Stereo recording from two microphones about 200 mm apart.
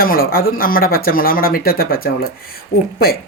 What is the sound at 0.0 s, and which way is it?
Speech, 45° left (ahead or behind).